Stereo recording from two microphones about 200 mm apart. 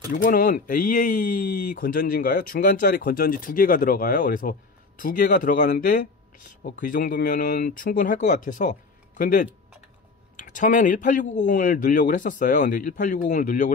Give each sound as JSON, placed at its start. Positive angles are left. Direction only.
{"t": 0.1, "sound": "speech", "side_deg": 45}